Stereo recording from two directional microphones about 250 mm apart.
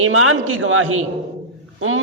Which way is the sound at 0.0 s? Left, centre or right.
Right.